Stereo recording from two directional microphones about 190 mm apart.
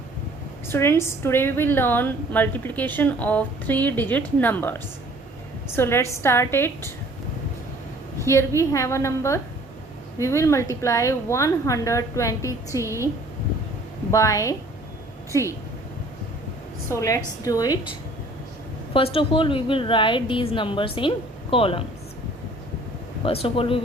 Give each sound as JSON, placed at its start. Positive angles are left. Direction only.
{"t": 0.7, "sound": "a woman's voice", "side_deg": 10}
{"t": 8.2, "sound": "a woman's voice", "side_deg": 15}
{"t": 14.1, "sound": "a woman's voice", "side_deg": 15}
{"t": 16.9, "sound": "a woman's voice", "side_deg": 15}
{"t": 18.9, "sound": "a woman's voice", "side_deg": 30}
{"t": 23.2, "sound": "a woman's voice", "side_deg": 30}